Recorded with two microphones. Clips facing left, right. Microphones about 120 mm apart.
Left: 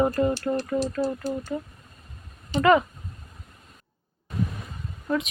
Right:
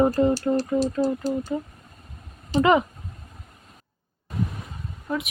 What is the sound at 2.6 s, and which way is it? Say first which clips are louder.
Speech: even; 20° right (ahead or behind).